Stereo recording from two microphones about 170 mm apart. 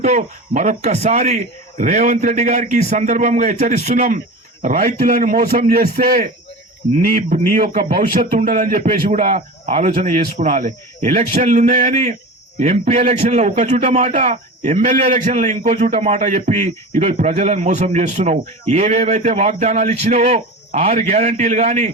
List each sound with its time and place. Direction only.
0.0 s a man's voice: 45° right (ahead or behind)
8.8 s a man's voice: 40° right (ahead or behind)